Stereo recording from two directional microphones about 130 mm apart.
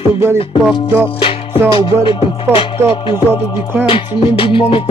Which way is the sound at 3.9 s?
40° left (ahead or behind).